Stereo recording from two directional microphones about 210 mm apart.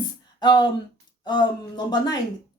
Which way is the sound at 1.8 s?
20° left (ahead or behind).